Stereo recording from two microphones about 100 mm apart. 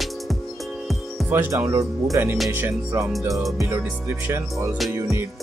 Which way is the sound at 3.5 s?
25° right (ahead or behind).